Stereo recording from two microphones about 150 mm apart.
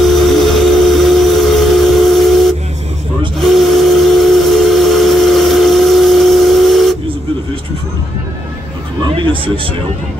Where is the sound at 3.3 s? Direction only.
Centre (ahead or behind).